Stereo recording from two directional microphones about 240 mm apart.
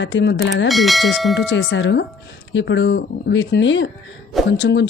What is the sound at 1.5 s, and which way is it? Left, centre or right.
Speech, left.